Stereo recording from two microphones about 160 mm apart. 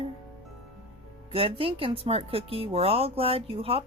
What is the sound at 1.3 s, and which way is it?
Speech, 35° right (ahead or behind).